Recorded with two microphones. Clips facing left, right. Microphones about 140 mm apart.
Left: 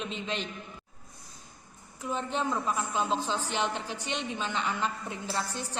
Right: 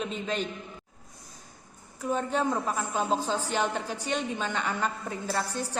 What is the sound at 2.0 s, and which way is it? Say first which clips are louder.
A woman's voice: right 4 dB; 45° right (ahead or behind).